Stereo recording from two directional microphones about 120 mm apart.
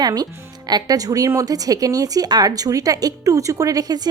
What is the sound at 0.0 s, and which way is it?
A woman's voice, 30° right (ahead or behind).